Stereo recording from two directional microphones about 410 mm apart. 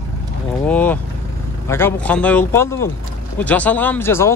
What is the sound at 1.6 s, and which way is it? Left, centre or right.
Speech, centre.